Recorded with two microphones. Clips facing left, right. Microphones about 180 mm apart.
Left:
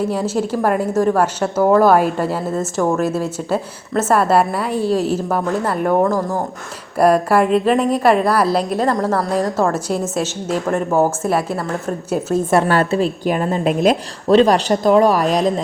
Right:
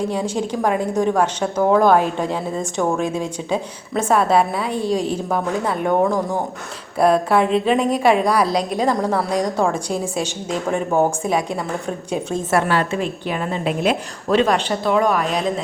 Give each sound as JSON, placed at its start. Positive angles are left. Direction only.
{"t": 0.0, "sound": "a woman's voice", "side_deg": 5}
{"t": 12.6, "sound": "a woman's voice", "side_deg": 45}